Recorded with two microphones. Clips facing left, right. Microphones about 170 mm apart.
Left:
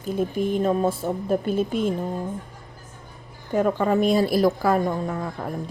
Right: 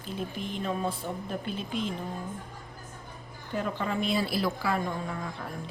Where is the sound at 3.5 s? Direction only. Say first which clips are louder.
Left 10 dB; 45° left (ahead or behind).